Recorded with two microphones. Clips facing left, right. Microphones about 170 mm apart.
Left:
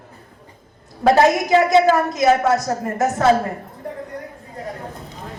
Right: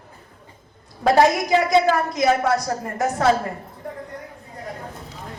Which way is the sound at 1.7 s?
20° left (ahead or behind).